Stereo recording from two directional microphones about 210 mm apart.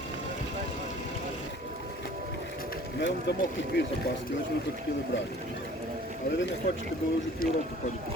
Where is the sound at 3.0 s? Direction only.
55° left (ahead or behind).